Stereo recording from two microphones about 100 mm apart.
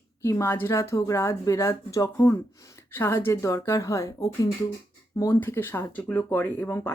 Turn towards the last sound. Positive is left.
turn(degrees=20)  # may be behind; listen again after turning